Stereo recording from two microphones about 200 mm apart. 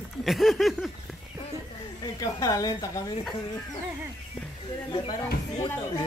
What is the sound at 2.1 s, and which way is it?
Speech, 15° left (ahead or behind).